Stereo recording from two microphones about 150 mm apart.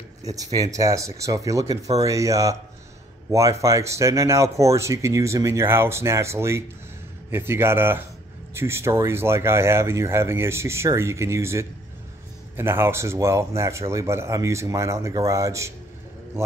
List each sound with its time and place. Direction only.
0.2 s speech: 25° right (ahead or behind)